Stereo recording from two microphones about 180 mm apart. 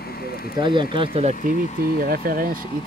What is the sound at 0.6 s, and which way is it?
Speech, 25° right (ahead or behind).